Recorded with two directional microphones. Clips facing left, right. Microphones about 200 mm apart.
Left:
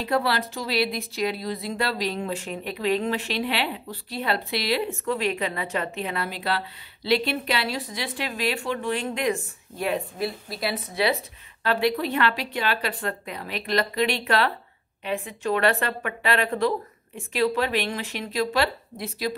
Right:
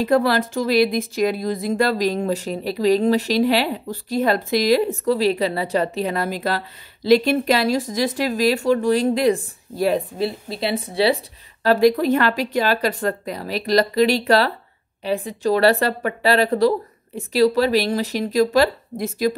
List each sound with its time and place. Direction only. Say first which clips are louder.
0.0 s speech: right 7 dB; 45° right (ahead or behind)
11.6 s speech: right 8 dB; 40° right (ahead or behind)